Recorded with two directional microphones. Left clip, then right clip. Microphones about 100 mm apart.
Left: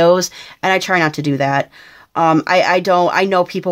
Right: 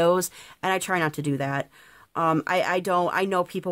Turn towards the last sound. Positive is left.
turn(degrees=-40)  # may be behind; listen again after turning